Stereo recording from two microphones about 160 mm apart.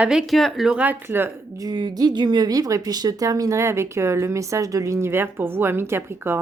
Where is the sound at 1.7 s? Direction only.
25° right (ahead or behind).